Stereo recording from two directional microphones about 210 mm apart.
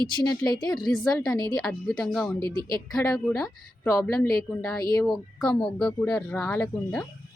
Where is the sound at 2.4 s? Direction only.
20° right (ahead or behind).